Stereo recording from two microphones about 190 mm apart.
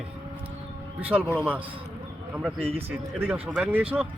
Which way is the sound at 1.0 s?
10° right (ahead or behind).